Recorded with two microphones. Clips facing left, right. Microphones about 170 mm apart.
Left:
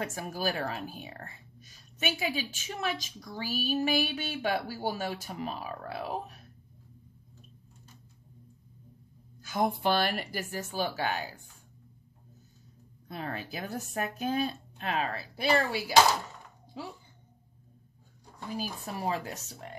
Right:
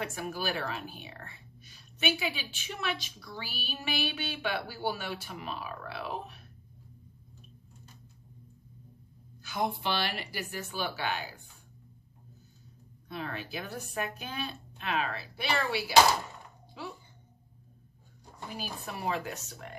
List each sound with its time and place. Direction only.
0.0 s a woman's voice: 45° left (ahead or behind)
9.4 s a woman's voice: 45° left (ahead or behind)
13.1 s a woman's voice: 40° left (ahead or behind)
18.6 s a woman's voice: 35° left (ahead or behind)